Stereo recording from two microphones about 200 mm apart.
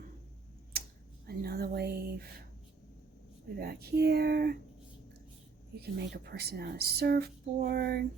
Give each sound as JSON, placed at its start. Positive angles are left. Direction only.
{"t": 1.3, "sound": "a sound", "side_deg": -50}
{"t": 3.6, "sound": "speech", "side_deg": -50}
{"t": 5.8, "sound": "speech", "side_deg": -55}